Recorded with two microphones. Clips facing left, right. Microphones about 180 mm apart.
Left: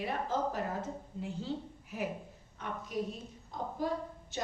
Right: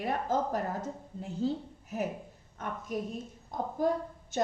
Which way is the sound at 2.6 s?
50° right (ahead or behind).